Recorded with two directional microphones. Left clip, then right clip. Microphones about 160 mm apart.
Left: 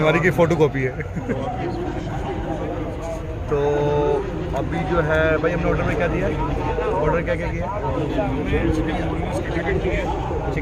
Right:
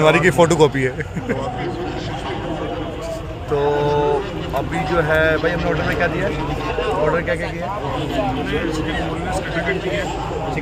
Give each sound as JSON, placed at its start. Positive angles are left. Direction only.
{"t": 0.0, "sound": "a man's voice", "side_deg": -20}
{"t": 3.8, "sound": "vehicle", "side_deg": -15}
{"t": 4.9, "sound": "speech", "side_deg": -15}
{"t": 7.0, "sound": "speech", "side_deg": 0}